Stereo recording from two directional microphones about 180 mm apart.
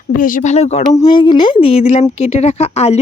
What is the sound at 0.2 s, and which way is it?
Speech, 45° left (ahead or behind).